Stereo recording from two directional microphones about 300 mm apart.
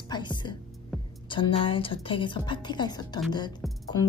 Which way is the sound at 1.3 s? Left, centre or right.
Centre.